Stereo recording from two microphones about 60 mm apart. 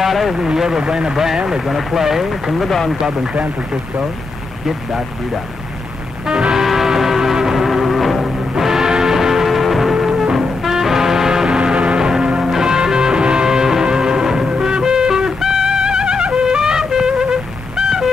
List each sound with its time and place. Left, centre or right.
0.0 s speech: centre
4.6 s speech: centre
6.2 s music: centre